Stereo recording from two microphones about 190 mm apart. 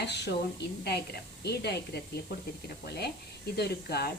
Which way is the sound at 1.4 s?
60° left (ahead or behind).